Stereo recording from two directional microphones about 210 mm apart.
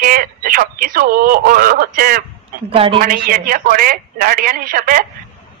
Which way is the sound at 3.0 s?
45° right (ahead or behind).